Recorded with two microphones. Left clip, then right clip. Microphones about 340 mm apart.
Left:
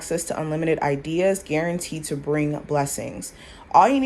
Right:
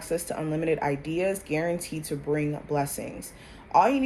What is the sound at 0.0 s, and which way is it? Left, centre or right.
Speech, left.